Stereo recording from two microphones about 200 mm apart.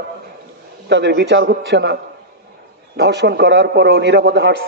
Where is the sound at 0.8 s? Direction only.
60° right (ahead or behind).